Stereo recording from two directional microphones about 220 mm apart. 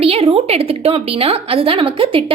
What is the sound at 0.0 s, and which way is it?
A woman's voice, 25° right (ahead or behind).